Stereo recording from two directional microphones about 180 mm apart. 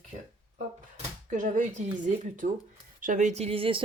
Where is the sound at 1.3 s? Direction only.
45° right (ahead or behind).